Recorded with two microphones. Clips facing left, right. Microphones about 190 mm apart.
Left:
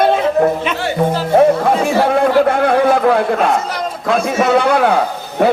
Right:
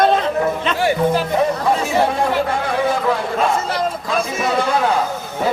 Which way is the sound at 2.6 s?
60° left (ahead or behind).